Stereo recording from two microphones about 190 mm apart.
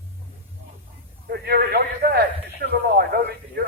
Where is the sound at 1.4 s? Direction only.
55° right (ahead or behind).